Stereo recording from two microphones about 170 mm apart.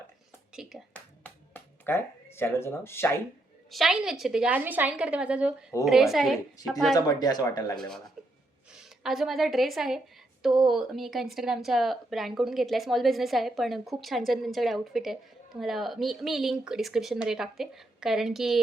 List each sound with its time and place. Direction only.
0.5 s speech: 5° right (ahead or behind)
1.8 s speech: 15° left (ahead or behind)
3.7 s a woman's voice: centre (ahead or behind)
6.9 s speech: 20° left (ahead or behind)
7.8 s a woman's voice: 5° left (ahead or behind)